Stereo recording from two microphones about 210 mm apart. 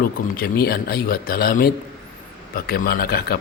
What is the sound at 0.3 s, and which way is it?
A man's voice, 45° left (ahead or behind).